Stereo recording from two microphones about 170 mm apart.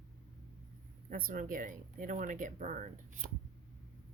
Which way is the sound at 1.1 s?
55° right (ahead or behind).